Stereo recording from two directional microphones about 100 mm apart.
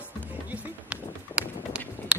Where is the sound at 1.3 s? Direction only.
10° right (ahead or behind).